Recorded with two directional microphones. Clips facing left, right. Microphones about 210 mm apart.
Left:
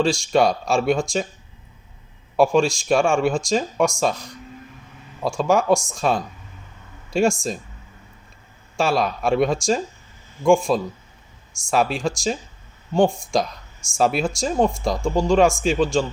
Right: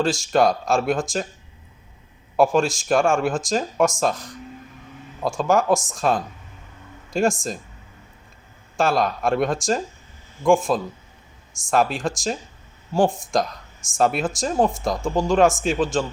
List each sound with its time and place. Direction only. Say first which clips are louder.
0.0 s speech: left 1 dB; 5° right (ahead or behind)
2.3 s speech: left 1 dB; centre (ahead or behind)
8.8 s speech: even; centre (ahead or behind)